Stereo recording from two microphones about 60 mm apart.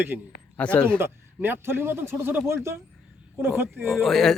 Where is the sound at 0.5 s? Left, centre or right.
Left.